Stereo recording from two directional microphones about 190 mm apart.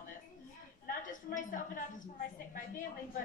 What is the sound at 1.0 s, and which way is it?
Speech, 45° left (ahead or behind).